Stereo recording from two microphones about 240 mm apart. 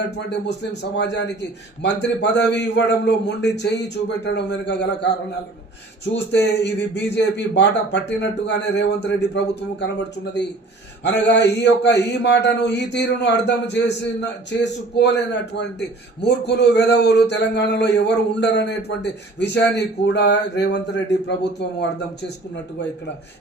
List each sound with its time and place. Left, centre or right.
0.3 s speech: left
6.1 s speech: left
11.0 s speech: left